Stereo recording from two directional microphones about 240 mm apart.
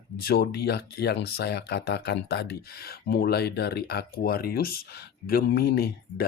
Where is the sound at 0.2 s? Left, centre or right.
Left.